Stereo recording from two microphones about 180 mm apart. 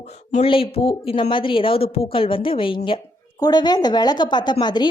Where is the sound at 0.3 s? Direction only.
35° left (ahead or behind).